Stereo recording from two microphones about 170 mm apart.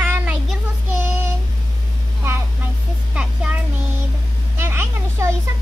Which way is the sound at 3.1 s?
5° right (ahead or behind).